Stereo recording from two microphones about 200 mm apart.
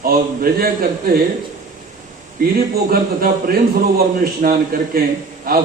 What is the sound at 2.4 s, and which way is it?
A man's voice, 45° right (ahead or behind).